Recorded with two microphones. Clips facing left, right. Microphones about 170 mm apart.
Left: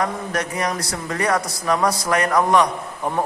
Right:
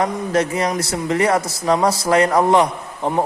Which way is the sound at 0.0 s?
25° right (ahead or behind).